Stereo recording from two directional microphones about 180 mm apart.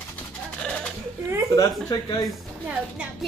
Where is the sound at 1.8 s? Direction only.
25° left (ahead or behind).